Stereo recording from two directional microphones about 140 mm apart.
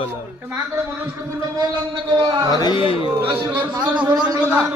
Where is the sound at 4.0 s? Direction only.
10° right (ahead or behind).